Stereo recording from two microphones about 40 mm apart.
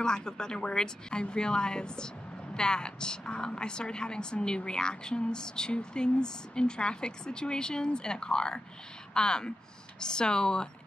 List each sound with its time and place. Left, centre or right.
0.0 s a woman's voice: centre